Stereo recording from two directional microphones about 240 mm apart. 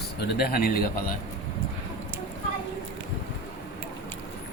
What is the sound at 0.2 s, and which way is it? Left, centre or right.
Speech, left.